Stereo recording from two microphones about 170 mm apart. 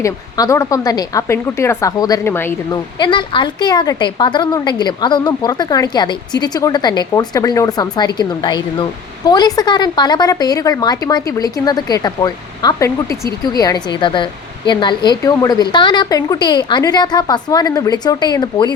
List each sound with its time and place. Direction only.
0.0 s speech: 20° left (ahead or behind)
3.0 s speech: 30° left (ahead or behind)